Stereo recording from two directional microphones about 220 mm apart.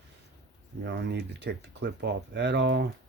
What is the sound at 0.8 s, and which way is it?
Speech, 50° right (ahead or behind).